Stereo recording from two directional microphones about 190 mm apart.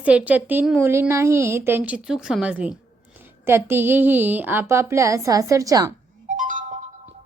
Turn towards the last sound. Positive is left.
turn(degrees=-45)  # may be behind; listen again after turning